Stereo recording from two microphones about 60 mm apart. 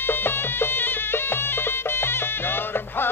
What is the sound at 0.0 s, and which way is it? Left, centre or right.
Music, left.